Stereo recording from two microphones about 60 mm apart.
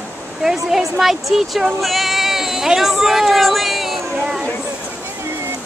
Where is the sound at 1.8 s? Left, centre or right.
Centre.